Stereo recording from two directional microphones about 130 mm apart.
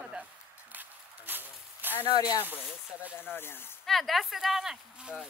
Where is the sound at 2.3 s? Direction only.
15° right (ahead or behind).